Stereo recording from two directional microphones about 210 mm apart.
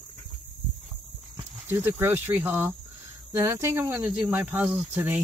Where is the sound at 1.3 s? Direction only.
10° right (ahead or behind).